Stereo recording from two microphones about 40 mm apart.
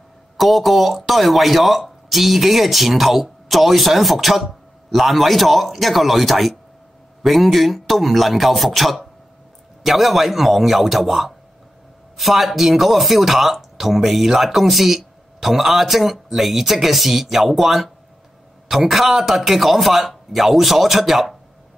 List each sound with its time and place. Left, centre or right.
0.4 s speech: centre